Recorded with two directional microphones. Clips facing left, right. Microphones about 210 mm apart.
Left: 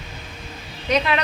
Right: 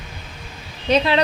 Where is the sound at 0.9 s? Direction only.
30° right (ahead or behind).